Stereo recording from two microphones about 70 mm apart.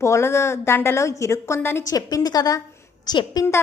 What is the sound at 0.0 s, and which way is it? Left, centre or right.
A woman's voice, left.